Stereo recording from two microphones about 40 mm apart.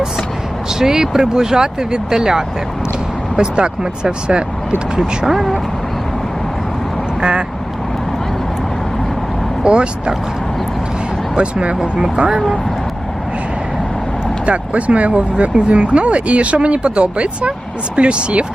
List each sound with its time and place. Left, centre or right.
0.8 s speech: centre
4.9 s speech: centre
7.2 s speech: right
9.6 s speech: right
11.3 s speech: right
14.4 s speech: right